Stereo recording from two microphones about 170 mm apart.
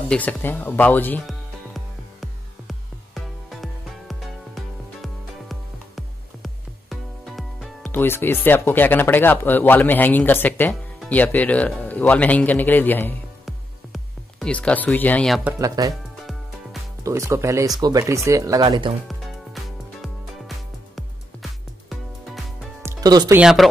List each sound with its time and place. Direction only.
0.1 s speech: 10° left (ahead or behind)
1.2 s music: centre (ahead or behind)
7.8 s speech: 15° left (ahead or behind)
13.5 s music: centre (ahead or behind)
15.6 s speech: 20° right (ahead or behind)
17.0 s speech: 15° right (ahead or behind)
19.0 s music: centre (ahead or behind)
22.8 s music: 20° right (ahead or behind)
23.3 s speech: 5° right (ahead or behind)